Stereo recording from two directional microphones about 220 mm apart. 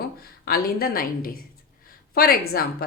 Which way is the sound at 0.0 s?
45° left (ahead or behind).